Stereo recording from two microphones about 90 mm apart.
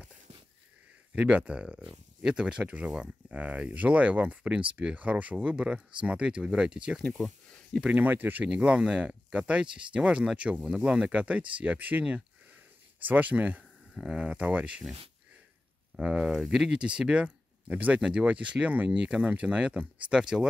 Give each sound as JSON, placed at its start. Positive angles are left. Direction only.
{"t": 1.1, "sound": "speech", "side_deg": -15}
{"t": 7.0, "sound": "speech", "side_deg": 5}
{"t": 7.8, "sound": "speech", "side_deg": -20}
{"t": 16.0, "sound": "speech", "side_deg": -10}